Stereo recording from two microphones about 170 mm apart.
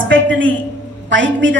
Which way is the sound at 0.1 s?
90° right.